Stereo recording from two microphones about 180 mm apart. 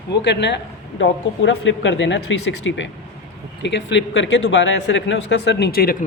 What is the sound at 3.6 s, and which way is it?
Speech, 80° left.